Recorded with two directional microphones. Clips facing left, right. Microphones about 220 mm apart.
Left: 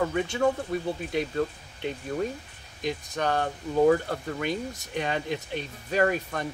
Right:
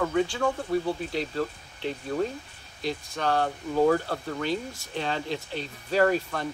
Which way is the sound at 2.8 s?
15° left (ahead or behind).